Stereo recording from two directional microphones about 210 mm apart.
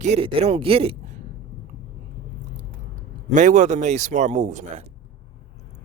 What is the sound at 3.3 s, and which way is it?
Speech, 35° right (ahead or behind).